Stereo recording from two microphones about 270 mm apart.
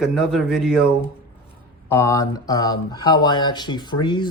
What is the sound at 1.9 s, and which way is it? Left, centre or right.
Speech, centre.